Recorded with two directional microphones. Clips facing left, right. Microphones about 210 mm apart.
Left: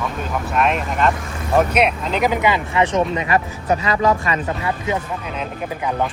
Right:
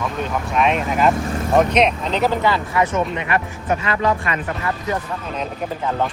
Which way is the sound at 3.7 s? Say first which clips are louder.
Left 2 dB; 35° left (ahead or behind).